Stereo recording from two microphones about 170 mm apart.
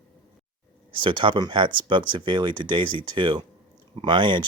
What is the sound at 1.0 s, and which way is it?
Speech, 30° right (ahead or behind).